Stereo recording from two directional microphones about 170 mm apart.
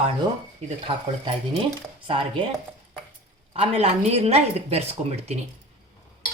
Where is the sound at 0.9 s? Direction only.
30° right (ahead or behind).